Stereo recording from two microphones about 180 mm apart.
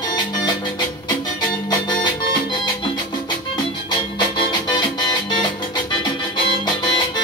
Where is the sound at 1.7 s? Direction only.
25° left (ahead or behind).